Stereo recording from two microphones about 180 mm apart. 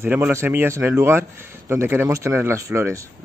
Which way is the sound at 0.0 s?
10° right (ahead or behind).